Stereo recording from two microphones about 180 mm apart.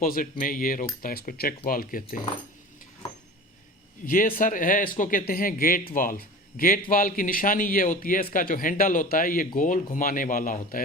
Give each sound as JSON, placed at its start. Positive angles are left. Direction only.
{"t": 0.0, "sound": "speech", "side_deg": 50}
{"t": 4.0, "sound": "speech", "side_deg": 50}